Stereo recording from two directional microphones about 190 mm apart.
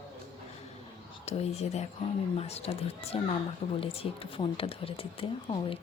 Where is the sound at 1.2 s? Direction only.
35° left (ahead or behind).